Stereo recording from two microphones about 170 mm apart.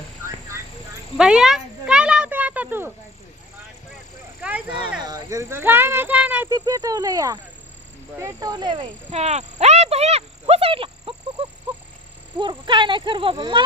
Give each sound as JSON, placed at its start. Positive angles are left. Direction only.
{"t": 1.1, "sound": "a sound", "side_deg": -5}
{"t": 4.4, "sound": "a sound", "side_deg": -10}
{"t": 5.0, "sound": "speech", "side_deg": -20}
{"t": 6.7, "sound": "speech", "side_deg": -20}
{"t": 9.0, "sound": "cricket", "side_deg": -40}
{"t": 12.4, "sound": "speech", "side_deg": -25}